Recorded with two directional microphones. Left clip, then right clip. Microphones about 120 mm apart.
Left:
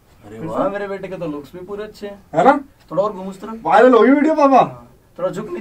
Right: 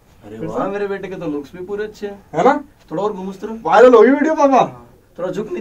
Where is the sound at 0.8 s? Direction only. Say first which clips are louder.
Right 2 dB; 15° right (ahead or behind).